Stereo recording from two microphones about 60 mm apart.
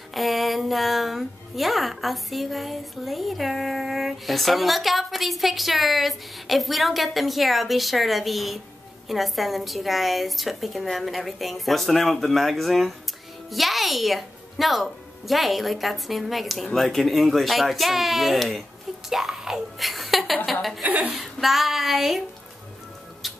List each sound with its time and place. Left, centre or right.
0.1 s speech: centre
20.8 s a woman's voice: right
21.1 s speech: centre
23.2 s music: centre